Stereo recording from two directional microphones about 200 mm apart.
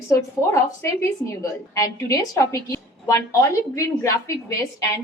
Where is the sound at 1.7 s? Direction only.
15° left (ahead or behind).